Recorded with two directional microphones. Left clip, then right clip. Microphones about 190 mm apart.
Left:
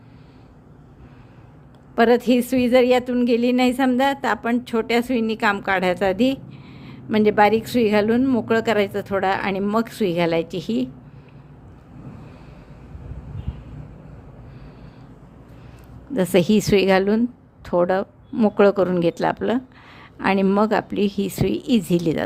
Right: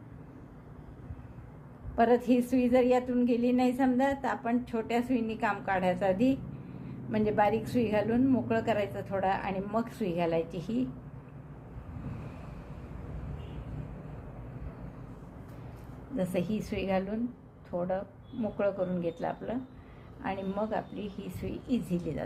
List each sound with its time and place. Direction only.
2.0 s a woman's voice: 45° left (ahead or behind)
16.1 s a woman's voice: 50° left (ahead or behind)